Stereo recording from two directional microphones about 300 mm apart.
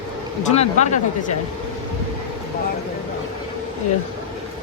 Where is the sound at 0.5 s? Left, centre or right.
Left.